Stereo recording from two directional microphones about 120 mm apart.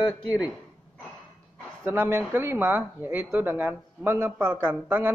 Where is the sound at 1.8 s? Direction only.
20° right (ahead or behind).